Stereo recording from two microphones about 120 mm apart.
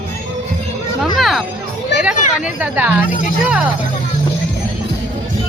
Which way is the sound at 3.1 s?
90° left.